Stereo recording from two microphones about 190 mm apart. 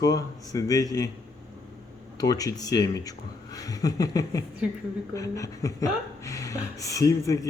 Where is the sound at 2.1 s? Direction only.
20° left (ahead or behind).